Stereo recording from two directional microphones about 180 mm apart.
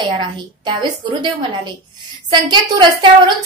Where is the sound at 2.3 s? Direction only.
25° right (ahead or behind).